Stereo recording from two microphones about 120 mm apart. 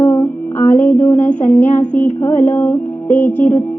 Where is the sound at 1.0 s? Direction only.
15° left (ahead or behind).